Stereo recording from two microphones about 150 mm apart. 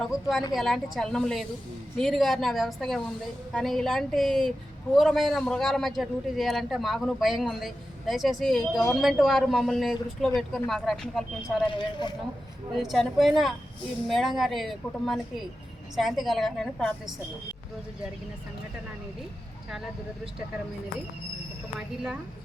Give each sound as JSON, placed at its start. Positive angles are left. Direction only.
{"t": 0.0, "sound": "a man's voice", "side_deg": 0}
{"t": 12.7, "sound": "a man's voice", "side_deg": 0}
{"t": 21.8, "sound": "a man's voice", "side_deg": -5}